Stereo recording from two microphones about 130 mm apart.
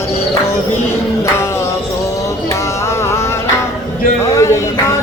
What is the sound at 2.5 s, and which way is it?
Music, 20° left (ahead or behind).